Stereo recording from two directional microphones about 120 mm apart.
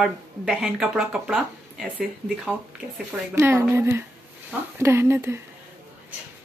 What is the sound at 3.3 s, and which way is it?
Speech, 20° right (ahead or behind).